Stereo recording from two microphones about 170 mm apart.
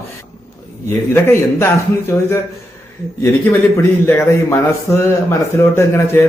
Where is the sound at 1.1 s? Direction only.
15° left (ahead or behind).